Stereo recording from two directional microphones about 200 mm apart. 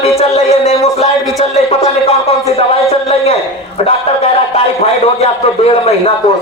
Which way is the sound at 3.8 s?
30° left (ahead or behind).